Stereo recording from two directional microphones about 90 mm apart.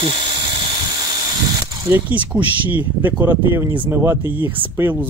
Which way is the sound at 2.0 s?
15° right (ahead or behind).